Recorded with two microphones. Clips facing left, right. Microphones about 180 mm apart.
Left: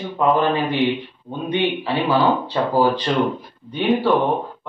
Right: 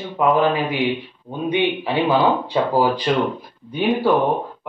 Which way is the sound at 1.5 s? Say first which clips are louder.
Right 1 dB; 15° right (ahead or behind).